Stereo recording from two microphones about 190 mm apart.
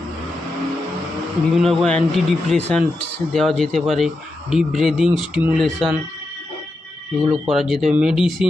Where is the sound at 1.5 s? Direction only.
Centre (ahead or behind).